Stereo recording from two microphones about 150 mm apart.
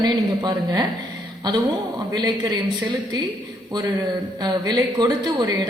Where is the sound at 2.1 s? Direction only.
30° right (ahead or behind).